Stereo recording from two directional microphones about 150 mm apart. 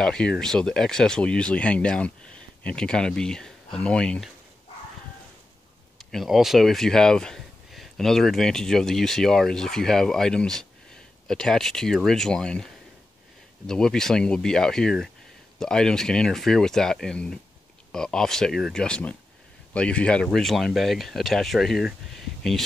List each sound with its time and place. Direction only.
0.0 s speech: 5° left (ahead or behind)
5.9 s speech: centre (ahead or behind)